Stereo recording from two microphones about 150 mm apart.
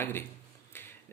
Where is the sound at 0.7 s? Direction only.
15° left (ahead or behind).